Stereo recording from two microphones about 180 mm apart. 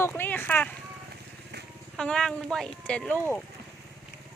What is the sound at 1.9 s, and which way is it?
Speech, 5° left (ahead or behind).